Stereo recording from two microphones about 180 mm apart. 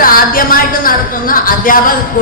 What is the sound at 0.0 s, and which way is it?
A woman's voice, 50° left (ahead or behind).